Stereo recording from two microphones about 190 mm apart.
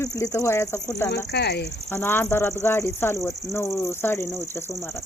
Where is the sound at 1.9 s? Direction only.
10° left (ahead or behind).